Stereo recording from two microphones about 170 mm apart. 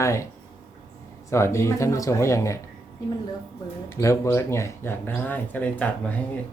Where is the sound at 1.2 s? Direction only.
15° left (ahead or behind).